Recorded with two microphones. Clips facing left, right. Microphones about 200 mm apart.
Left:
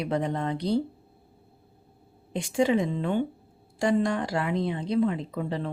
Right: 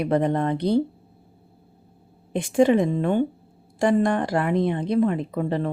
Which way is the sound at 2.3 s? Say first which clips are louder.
Right 6 dB; 55° right (ahead or behind).